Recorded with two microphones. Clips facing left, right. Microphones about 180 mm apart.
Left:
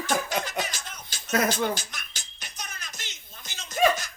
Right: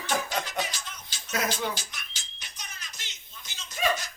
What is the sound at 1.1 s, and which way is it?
Music, 50° left (ahead or behind).